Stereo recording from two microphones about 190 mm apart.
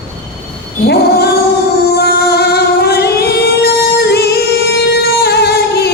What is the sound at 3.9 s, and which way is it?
Singing, 55° left (ahead or behind).